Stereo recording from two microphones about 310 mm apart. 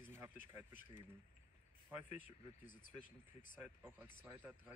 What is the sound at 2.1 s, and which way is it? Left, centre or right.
Speech, left.